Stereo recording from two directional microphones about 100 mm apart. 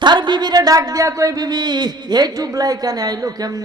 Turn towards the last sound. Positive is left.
turn(degrees=-40)  # may be behind; listen again after turning